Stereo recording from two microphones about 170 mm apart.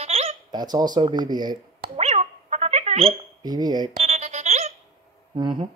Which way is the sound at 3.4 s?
25° right (ahead or behind).